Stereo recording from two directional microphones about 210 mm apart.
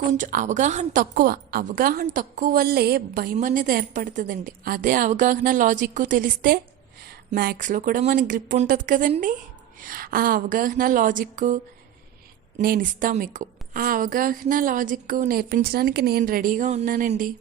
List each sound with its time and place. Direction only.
0.2 s a woman's voice: 40° right (ahead or behind)
3.3 s a woman's voice: 40° right (ahead or behind)